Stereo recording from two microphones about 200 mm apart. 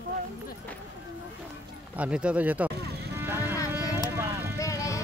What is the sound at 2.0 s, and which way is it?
Speech, 5° right (ahead or behind).